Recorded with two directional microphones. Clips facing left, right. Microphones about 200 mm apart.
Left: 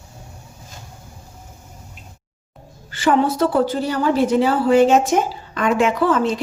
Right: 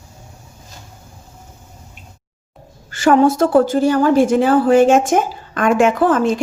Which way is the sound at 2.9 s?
45° right (ahead or behind).